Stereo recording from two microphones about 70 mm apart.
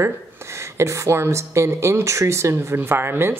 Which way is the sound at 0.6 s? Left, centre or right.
Right.